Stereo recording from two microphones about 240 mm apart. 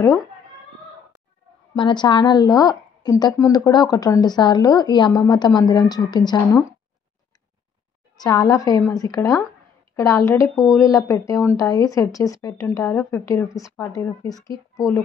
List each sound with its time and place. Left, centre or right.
1.8 s speech: centre
8.2 s speech: centre